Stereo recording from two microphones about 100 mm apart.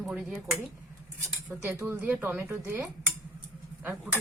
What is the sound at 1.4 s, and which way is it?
Speech, 15° right (ahead or behind).